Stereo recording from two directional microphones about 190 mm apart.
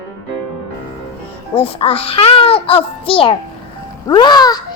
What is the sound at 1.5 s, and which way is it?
A child's voice, 30° left (ahead or behind).